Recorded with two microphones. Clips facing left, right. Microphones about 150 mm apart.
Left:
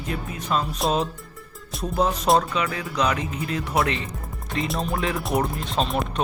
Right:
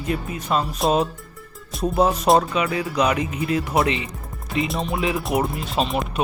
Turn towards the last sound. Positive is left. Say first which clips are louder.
# right 1 dB
turn(degrees=-5)  # may be behind; listen again after turning